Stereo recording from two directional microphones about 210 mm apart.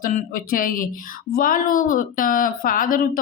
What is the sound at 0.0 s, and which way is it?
A woman's voice, 45° left (ahead or behind).